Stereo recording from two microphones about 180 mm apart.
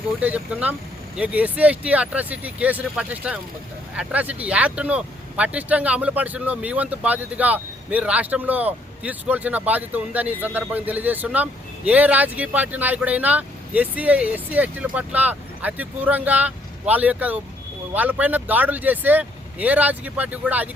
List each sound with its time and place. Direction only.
0.2 s speech: 10° right (ahead or behind)